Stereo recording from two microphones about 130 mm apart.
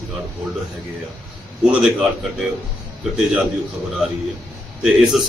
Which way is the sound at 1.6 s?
10° right (ahead or behind).